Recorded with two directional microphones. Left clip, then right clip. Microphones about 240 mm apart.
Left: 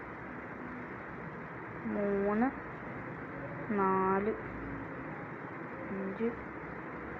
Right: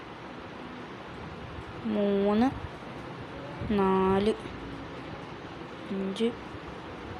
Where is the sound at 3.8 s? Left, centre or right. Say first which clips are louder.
Right 4 dB; right.